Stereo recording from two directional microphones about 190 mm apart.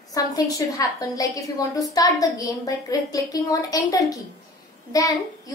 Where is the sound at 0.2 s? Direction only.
20° left (ahead or behind).